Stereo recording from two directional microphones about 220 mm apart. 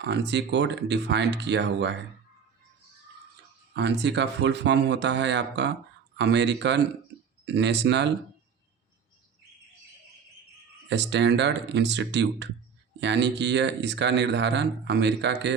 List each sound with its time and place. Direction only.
0.0 s speech: 50° right (ahead or behind)
3.8 s speech: 50° right (ahead or behind)
10.8 s speech: 55° right (ahead or behind)